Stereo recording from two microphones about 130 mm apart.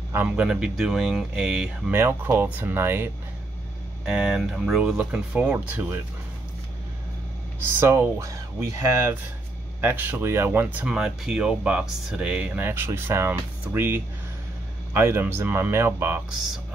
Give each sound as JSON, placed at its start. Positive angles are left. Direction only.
{"t": 0.1, "sound": "speech", "side_deg": -10}
{"t": 1.9, "sound": "speech", "side_deg": -15}
{"t": 4.0, "sound": "speech", "side_deg": -5}
{"t": 7.8, "sound": "speech", "side_deg": -20}